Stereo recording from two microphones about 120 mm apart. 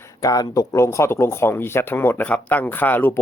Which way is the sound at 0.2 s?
30° left (ahead or behind).